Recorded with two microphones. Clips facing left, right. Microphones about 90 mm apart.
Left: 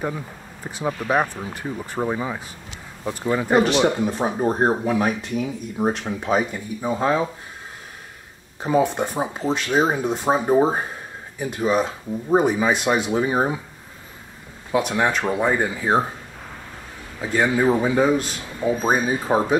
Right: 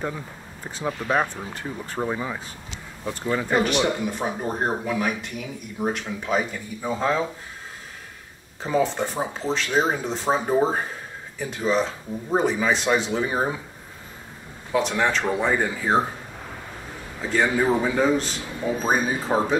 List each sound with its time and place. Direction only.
0.7 s speech: 15° left (ahead or behind)
3.4 s speech: 25° left (ahead or behind)
6.2 s speech: 20° left (ahead or behind)
8.6 s speech: 15° left (ahead or behind)
14.7 s speech: 15° left (ahead or behind)
17.2 s speech: 10° left (ahead or behind)